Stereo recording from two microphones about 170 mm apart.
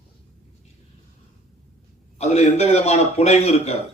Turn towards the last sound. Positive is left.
turn(degrees=40)  # may be behind; listen again after turning